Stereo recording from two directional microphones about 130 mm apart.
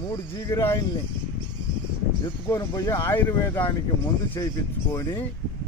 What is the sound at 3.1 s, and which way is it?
Speech, 15° left (ahead or behind).